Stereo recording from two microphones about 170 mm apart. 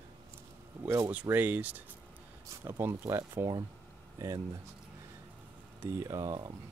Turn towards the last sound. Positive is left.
turn(degrees=-25)  # may be behind; listen again after turning